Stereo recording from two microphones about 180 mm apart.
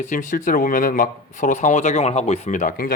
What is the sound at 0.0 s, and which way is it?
Speech, 45° left (ahead or behind).